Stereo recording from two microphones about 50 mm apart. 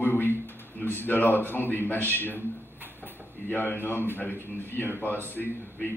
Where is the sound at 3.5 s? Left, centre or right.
Left.